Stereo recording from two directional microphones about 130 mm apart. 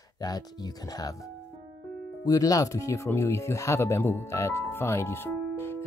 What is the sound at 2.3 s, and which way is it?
Speech, 25° left (ahead or behind).